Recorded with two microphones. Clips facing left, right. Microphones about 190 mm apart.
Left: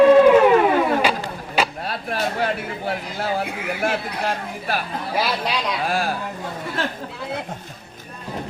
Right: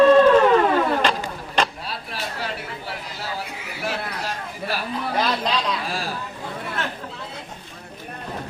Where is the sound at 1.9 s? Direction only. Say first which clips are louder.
Left 7 dB; 55° left (ahead or behind).